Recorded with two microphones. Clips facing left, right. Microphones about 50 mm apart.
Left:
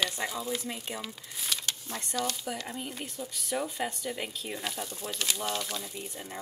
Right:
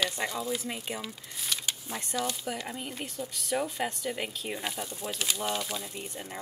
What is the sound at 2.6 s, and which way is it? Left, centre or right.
Speech, centre.